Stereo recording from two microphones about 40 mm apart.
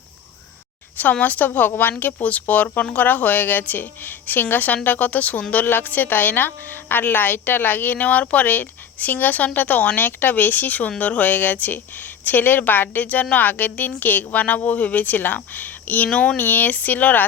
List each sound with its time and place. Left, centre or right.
1.2 s a woman's voice: left
2.2 s a woman's voice: left
5.6 s a woman's voice: left